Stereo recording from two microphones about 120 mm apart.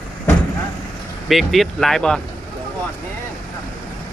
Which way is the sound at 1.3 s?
Centre (ahead or behind).